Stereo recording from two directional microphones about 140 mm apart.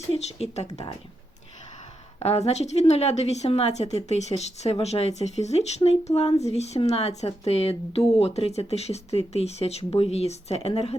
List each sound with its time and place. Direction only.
0.1 s speech: 50° left (ahead or behind)
2.1 s a woman's voice: 50° left (ahead or behind)